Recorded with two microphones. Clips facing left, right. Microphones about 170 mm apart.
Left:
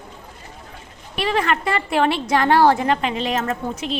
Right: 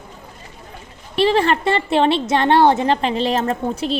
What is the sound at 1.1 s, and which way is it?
A woman's voice, 30° right (ahead or behind).